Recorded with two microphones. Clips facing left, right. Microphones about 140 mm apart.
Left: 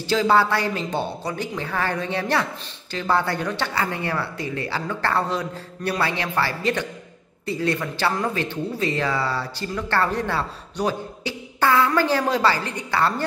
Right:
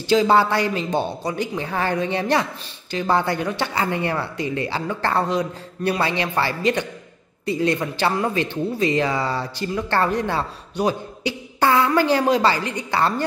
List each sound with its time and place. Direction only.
0.0 s speech: 20° right (ahead or behind)